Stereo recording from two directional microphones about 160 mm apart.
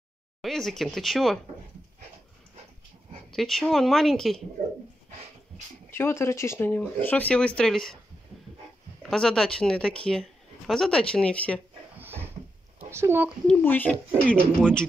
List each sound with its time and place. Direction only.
0.4 s speech: centre (ahead or behind)
3.3 s speech: centre (ahead or behind)
4.6 s speech: 45° right (ahead or behind)
5.9 s speech: 15° left (ahead or behind)
9.0 s speech: 5° left (ahead or behind)
12.0 s drawer open or close: 15° right (ahead or behind)
12.7 s a child's voice: 15° right (ahead or behind)
13.5 s speech: 10° left (ahead or behind)